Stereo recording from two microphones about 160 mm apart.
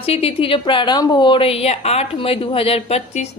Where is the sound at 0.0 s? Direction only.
40° left (ahead or behind).